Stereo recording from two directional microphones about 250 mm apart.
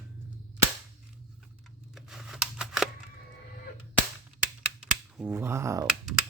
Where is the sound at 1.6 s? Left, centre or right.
Centre.